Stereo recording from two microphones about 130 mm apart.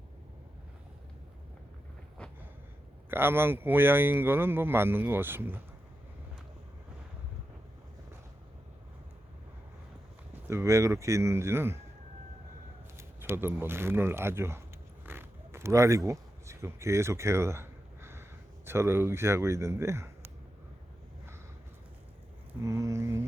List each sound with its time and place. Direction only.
3.1 s speech: 15° right (ahead or behind)
10.5 s speech: 20° right (ahead or behind)
13.0 s speech: 20° right (ahead or behind)
15.0 s zipper: 15° right (ahead or behind)
22.6 s a sound: 25° right (ahead or behind)